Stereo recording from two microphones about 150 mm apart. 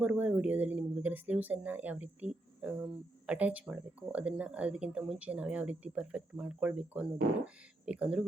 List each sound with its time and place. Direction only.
0.0 s speech: 10° right (ahead or behind)